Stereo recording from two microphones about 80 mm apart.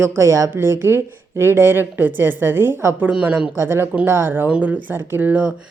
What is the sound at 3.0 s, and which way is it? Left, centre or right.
Speech, centre.